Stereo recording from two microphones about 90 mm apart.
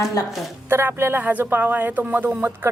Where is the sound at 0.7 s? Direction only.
25° right (ahead or behind).